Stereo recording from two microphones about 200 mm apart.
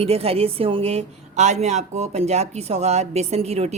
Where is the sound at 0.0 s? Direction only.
30° right (ahead or behind).